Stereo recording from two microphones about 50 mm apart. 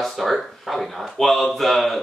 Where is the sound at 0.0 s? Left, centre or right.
Centre.